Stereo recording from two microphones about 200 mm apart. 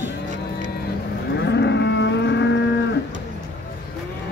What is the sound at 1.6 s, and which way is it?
Livestock, 60° left (ahead or behind).